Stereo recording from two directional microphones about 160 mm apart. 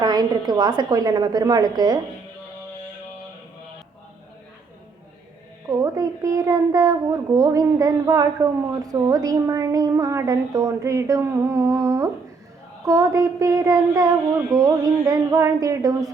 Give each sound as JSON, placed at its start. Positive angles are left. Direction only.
{"t": 0.0, "sound": "a woman's voice", "side_deg": -25}
{"t": 5.6, "sound": "a child's voice", "side_deg": -20}